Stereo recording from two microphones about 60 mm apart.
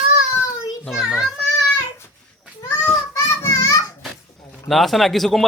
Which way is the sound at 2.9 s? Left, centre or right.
Left.